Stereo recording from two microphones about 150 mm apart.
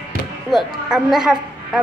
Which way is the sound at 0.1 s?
70° right (ahead or behind).